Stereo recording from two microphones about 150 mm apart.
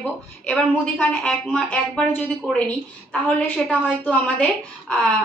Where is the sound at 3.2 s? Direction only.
10° left (ahead or behind).